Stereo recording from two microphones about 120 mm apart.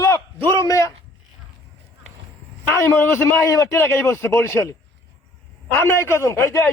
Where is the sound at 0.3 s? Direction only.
20° left (ahead or behind).